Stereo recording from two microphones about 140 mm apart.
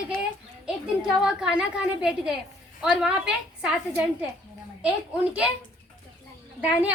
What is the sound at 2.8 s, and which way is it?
Speech, 5° right (ahead or behind).